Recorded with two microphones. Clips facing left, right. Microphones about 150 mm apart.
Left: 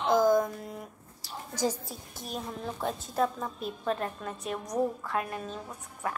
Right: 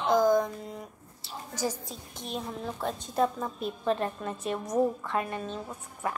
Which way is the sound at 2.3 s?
Centre (ahead or behind).